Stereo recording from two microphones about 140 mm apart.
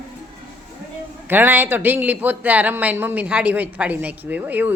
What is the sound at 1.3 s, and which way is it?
Speech, 15° right (ahead or behind).